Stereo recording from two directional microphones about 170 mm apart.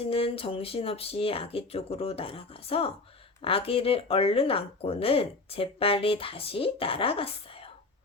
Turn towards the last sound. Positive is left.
turn(degrees=35)  # may be behind; listen again after turning